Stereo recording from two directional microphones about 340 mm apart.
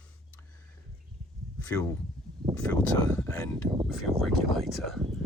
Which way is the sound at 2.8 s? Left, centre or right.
Centre.